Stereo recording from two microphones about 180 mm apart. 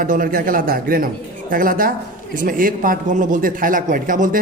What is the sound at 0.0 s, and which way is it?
A man's voice, 50° right (ahead or behind).